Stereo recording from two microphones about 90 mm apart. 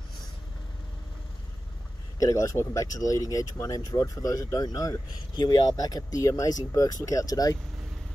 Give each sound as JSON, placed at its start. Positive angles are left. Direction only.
{"t": 2.1, "sound": "speech", "side_deg": 40}
{"t": 5.3, "sound": "speech", "side_deg": 55}